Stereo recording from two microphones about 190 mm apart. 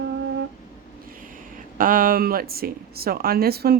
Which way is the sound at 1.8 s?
45° right (ahead or behind).